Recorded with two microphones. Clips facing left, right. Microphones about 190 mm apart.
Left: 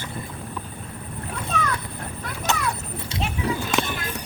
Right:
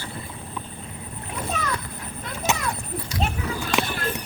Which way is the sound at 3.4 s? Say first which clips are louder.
Left 4 dB; 30° left (ahead or behind).